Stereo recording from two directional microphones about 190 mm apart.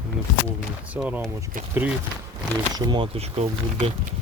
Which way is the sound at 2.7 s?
25° right (ahead or behind).